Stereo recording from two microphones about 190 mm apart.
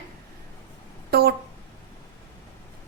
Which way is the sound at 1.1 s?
55° right (ahead or behind).